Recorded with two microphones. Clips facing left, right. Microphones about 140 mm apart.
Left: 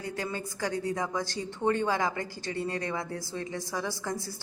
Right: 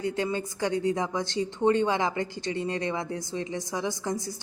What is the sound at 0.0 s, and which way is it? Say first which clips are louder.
A woman's voice: right 6 dB; 25° right (ahead or behind).